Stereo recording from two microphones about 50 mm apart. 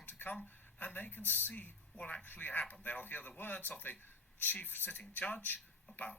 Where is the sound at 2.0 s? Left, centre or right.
Left.